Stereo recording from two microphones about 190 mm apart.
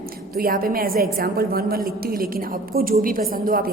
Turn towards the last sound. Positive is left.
turn(degrees=-50)  # may be behind; listen again after turning